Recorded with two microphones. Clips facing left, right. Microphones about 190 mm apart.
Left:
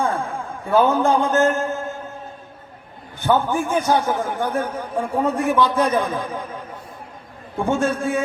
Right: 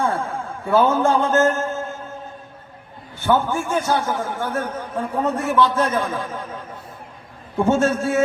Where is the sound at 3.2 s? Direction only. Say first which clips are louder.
Left 1 dB; 15° left (ahead or behind).